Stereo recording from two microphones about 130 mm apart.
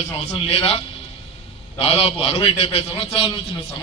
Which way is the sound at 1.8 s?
50° left (ahead or behind).